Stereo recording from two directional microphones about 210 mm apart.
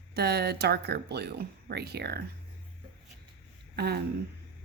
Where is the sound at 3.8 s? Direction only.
50° right (ahead or behind).